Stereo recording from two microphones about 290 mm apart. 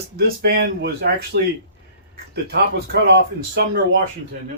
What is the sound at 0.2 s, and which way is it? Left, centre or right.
Speech, right.